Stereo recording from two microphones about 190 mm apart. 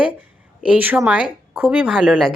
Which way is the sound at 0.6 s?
5° right (ahead or behind).